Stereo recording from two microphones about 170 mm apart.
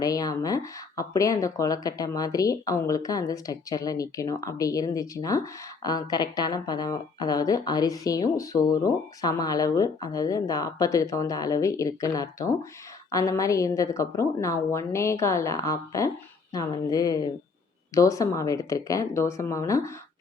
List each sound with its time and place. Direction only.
0.0 s speech: 20° left (ahead or behind)